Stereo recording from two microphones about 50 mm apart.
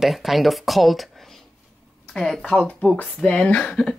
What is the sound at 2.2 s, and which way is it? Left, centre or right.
Speech, centre.